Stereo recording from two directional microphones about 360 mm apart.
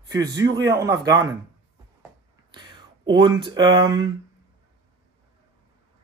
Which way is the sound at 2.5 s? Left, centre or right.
Centre.